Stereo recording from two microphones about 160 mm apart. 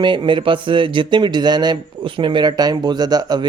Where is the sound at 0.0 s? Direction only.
30° right (ahead or behind).